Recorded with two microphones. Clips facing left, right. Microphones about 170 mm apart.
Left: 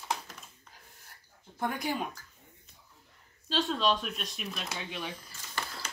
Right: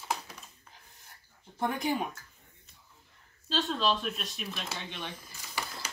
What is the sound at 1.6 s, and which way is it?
Speech, 20° right (ahead or behind).